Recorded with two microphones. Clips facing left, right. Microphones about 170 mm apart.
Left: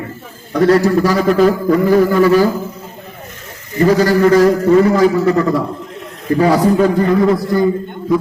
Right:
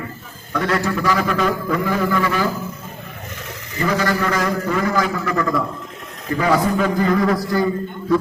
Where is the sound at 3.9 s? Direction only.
35° left (ahead or behind).